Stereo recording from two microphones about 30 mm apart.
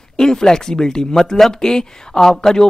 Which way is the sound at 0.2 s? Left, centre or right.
Left.